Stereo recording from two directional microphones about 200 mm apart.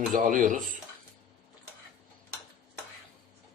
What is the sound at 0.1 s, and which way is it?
Speech, 40° right (ahead or behind).